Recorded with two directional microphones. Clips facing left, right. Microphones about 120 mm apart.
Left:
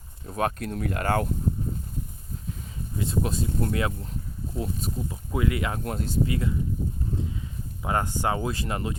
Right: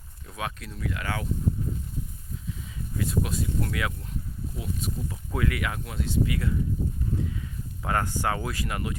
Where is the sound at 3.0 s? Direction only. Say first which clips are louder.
Left 1 dB; 25° left (ahead or behind).